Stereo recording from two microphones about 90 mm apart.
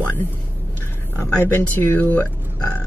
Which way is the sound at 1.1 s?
20° left (ahead or behind).